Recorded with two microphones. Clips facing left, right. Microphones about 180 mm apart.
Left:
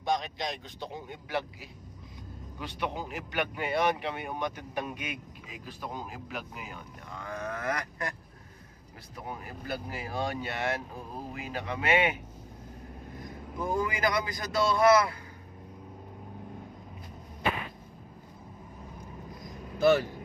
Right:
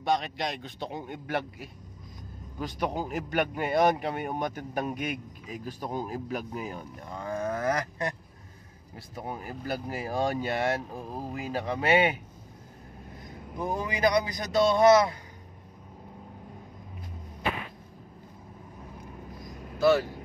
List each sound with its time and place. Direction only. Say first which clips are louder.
0.1 s a man's voice: right 3 dB; 65° right (ahead or behind)
2.6 s speech: right 4 dB; 40° right (ahead or behind)
9.3 s speech: right 3 dB; 40° right (ahead or behind)
13.6 s a man's voice: right 1 dB; 20° right (ahead or behind)